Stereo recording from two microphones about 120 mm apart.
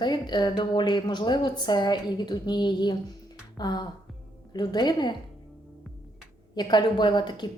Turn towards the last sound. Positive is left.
turn(degrees=40)  # may be behind; listen again after turning